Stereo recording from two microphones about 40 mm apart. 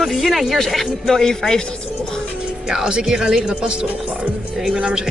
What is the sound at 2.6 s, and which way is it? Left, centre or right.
Speech, centre.